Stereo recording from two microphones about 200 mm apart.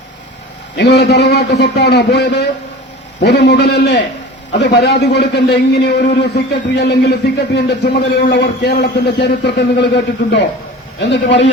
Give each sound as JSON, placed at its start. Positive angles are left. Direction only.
{"t": 0.8, "sound": "a man's voice", "side_deg": 60}